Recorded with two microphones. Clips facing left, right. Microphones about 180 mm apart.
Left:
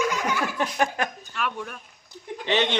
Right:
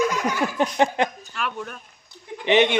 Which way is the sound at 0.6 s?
25° right (ahead or behind).